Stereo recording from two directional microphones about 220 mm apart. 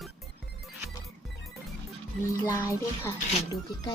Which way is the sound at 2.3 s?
15° left (ahead or behind).